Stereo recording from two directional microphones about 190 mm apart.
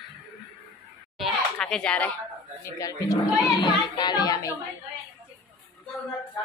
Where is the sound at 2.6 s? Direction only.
20° left (ahead or behind).